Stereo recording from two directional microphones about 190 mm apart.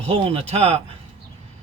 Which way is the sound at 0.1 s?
30° right (ahead or behind).